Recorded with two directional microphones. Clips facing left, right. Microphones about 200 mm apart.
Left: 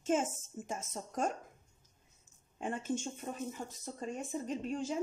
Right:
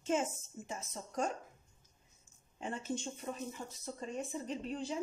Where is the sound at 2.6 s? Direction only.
50° left (ahead or behind).